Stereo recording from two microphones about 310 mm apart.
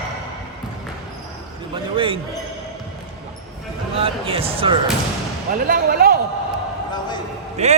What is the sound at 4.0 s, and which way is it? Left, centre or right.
Speech, centre.